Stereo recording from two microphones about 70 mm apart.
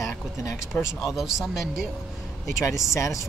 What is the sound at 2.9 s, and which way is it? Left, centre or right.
Speech, left.